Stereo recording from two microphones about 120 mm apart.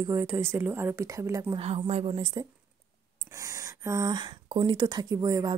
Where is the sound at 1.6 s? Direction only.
60° right (ahead or behind).